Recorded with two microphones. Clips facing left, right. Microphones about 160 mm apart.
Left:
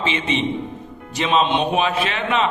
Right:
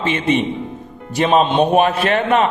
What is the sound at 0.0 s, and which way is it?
A man's voice, 55° right (ahead or behind).